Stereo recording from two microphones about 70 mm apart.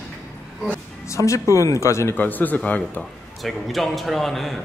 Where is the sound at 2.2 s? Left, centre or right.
Left.